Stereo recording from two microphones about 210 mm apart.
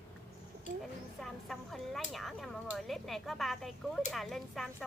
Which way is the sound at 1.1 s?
Centre (ahead or behind).